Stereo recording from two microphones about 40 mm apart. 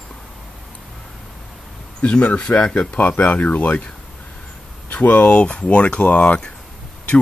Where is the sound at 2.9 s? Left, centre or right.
Left.